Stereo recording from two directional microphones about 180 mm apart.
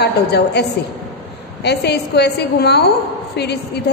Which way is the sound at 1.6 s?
65° left (ahead or behind).